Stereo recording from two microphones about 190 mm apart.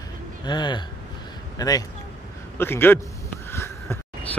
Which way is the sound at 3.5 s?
15° left (ahead or behind).